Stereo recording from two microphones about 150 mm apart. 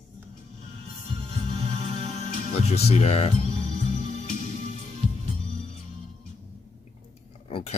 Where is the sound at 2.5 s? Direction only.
45° left (ahead or behind).